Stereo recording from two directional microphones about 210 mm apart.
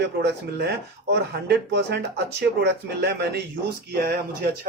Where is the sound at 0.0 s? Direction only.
55° right (ahead or behind).